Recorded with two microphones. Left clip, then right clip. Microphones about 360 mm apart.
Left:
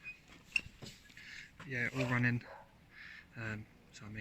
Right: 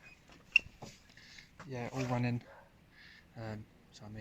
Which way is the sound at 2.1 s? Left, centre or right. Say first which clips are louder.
Left 2 dB; centre.